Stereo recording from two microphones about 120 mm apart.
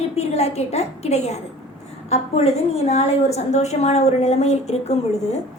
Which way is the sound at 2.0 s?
65° left (ahead or behind).